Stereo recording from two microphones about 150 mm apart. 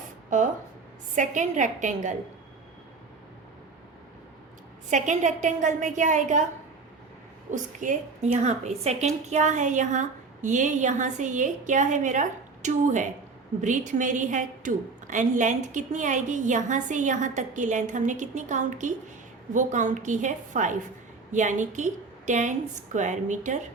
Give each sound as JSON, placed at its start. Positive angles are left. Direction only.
{"t": 0.3, "sound": "a woman's voice", "side_deg": -60}
{"t": 4.9, "sound": "a woman's voice", "side_deg": -55}
{"t": 7.5, "sound": "a woman's voice", "side_deg": -55}